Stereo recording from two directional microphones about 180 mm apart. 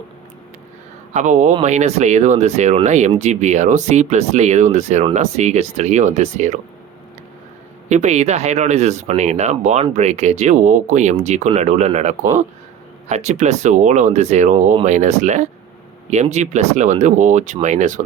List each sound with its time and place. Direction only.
1.1 s speech: 40° right (ahead or behind)
7.9 s speech: 40° right (ahead or behind)